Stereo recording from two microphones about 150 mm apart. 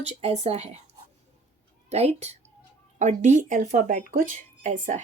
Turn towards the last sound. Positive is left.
turn(degrees=-60)  # may be behind; listen again after turning